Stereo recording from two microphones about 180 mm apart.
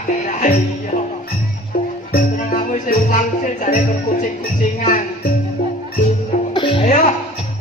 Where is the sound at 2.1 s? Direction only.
45° left (ahead or behind).